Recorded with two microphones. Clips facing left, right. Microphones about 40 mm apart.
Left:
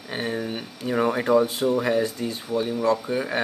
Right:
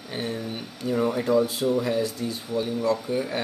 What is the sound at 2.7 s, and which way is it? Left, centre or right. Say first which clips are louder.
Speech: left 1 dB; left.